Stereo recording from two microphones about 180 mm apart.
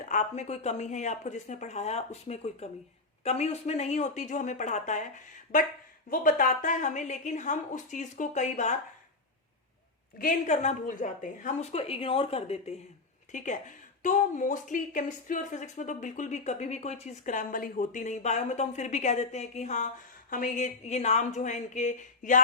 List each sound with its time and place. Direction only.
0.0 s a woman's voice: 40° left (ahead or behind)
6.1 s a woman's voice: 50° left (ahead or behind)
10.2 s a woman's voice: 45° left (ahead or behind)